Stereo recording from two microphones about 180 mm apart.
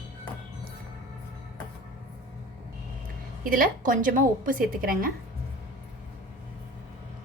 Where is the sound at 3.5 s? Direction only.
50° right (ahead or behind).